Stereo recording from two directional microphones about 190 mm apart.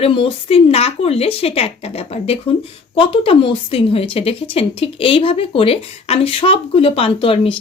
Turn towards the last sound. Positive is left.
turn(degrees=30)  # may be behind; listen again after turning